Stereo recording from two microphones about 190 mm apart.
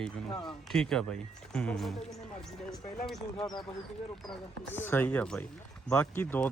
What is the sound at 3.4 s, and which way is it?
Speech, 25° left (ahead or behind).